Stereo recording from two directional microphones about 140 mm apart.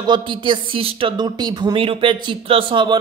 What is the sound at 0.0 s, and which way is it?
Speech, 35° right (ahead or behind).